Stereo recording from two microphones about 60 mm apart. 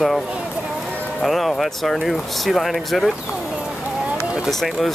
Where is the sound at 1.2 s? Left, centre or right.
Centre.